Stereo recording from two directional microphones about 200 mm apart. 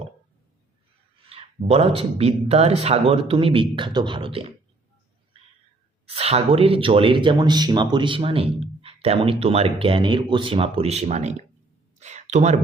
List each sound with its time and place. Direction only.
1.3 s speech: 30° right (ahead or behind)
6.1 s speech: 30° right (ahead or behind)
11.9 s a sound: 35° right (ahead or behind)